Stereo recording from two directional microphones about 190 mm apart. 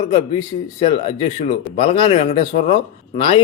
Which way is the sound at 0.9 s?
30° left (ahead or behind).